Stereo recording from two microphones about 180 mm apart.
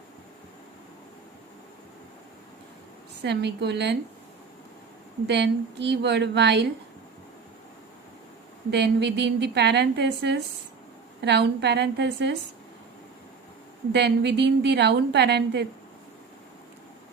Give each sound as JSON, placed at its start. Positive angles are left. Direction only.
{"t": 3.2, "sound": "a woman's voice", "side_deg": -70}
{"t": 5.2, "sound": "a woman's voice", "side_deg": -70}
{"t": 8.7, "sound": "a woman's voice", "side_deg": -70}
{"t": 13.9, "sound": "a woman's voice", "side_deg": -70}